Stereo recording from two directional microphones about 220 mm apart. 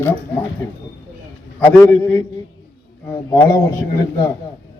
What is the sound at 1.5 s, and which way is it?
Speech, 10° left (ahead or behind).